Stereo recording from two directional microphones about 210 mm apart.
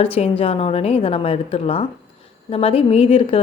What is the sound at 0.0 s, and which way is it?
A woman's voice, 25° left (ahead or behind).